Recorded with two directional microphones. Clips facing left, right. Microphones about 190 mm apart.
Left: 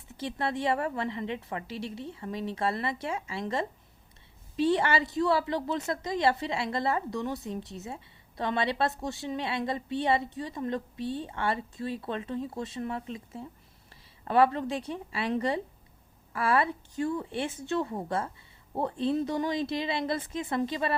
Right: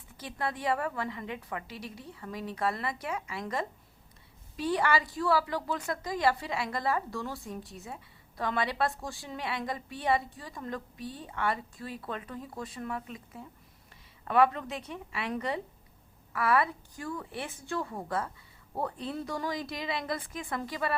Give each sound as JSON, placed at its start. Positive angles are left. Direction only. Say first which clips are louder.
{"t": 0.1, "sound": "a woman's voice", "louder": "left 4 dB", "side_deg": 25}